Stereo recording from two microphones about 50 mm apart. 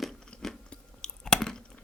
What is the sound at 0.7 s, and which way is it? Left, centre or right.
Chewing, centre.